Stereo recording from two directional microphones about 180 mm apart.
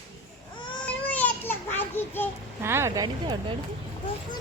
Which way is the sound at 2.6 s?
15° right (ahead or behind).